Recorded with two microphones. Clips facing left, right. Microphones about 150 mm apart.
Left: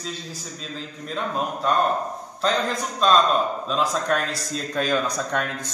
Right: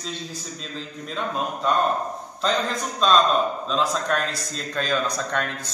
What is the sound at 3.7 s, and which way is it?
Speech, 5° left (ahead or behind).